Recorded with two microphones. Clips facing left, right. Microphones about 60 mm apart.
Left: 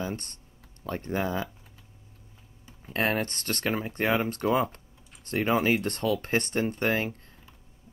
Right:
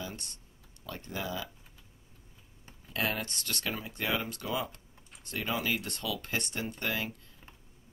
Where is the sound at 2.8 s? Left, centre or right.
Left.